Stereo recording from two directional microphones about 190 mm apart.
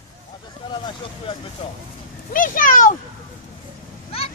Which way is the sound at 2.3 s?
45° left (ahead or behind).